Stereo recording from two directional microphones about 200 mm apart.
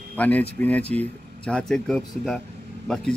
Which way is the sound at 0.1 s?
10° left (ahead or behind).